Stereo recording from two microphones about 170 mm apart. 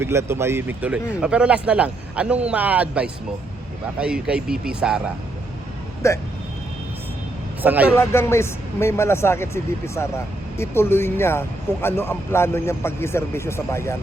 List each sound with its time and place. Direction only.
0.0 s speech: 15° right (ahead or behind)
6.0 s speech: 15° left (ahead or behind)
7.6 s speech: 10° right (ahead or behind)
7.9 s speech: 15° left (ahead or behind)